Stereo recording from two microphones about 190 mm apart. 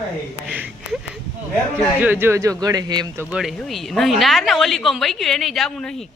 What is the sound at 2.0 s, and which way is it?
A man's voice, 10° right (ahead or behind).